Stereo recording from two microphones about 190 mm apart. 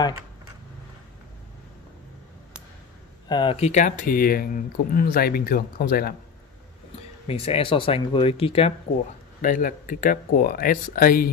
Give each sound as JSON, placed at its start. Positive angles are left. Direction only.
{"t": 3.3, "sound": "speech", "side_deg": 25}
{"t": 7.2, "sound": "speech", "side_deg": 30}
{"t": 9.4, "sound": "speech", "side_deg": 45}